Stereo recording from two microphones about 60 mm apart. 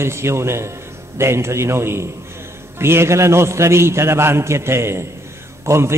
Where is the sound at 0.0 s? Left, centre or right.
Right.